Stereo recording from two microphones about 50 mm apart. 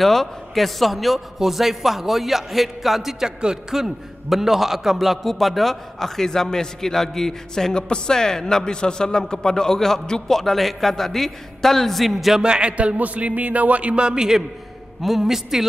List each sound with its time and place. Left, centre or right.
0.0 s a man's voice: centre
12.4 s a man's voice: right
15.0 s a woman's voice: centre